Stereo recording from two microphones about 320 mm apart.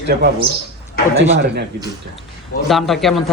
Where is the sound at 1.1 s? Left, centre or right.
Right.